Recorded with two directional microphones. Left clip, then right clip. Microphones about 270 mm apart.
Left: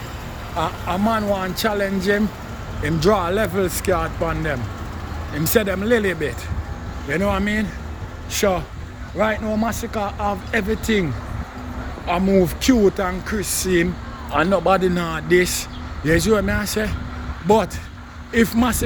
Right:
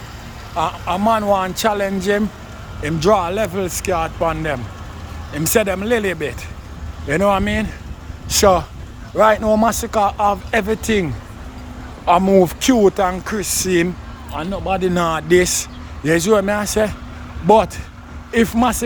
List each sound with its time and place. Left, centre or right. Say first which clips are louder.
0.5 s speech: right 4 dB; centre
14.3 s speech: left 5 dB; centre
14.8 s speech: right 4 dB; centre
18.3 s speech: right 3 dB; centre